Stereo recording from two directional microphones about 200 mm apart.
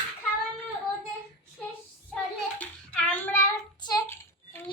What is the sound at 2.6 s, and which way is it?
Child singing, 5° left (ahead or behind).